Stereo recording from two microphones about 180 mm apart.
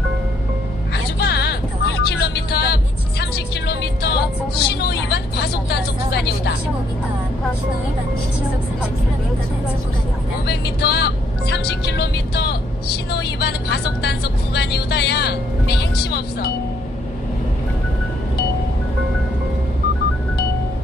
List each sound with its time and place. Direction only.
1.2 s vehicle: 65° left (ahead or behind)
2.0 s music: 65° left (ahead or behind)
4.6 s speech: 65° left (ahead or behind)
10.4 s speech: 65° left (ahead or behind)
13.1 s vehicle: 65° left (ahead or behind)